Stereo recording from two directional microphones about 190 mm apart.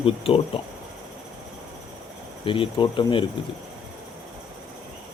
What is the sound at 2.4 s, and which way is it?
Speech, 25° left (ahead or behind).